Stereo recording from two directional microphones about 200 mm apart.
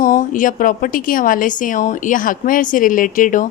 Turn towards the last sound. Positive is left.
turn(degrees=40)  # may be behind; listen again after turning